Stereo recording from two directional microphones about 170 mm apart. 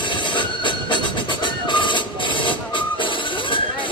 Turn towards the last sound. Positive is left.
turn(degrees=30)  # may be behind; listen again after turning